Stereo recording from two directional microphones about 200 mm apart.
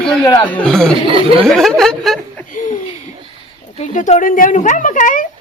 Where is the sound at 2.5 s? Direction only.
40° left (ahead or behind).